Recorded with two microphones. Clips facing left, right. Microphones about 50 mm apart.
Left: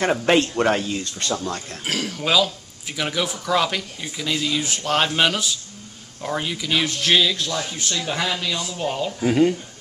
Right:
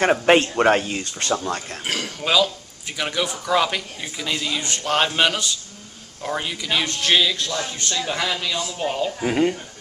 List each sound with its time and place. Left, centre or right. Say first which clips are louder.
0.3 s speech: right 2 dB; centre
1.9 s speech: left 1 dB; centre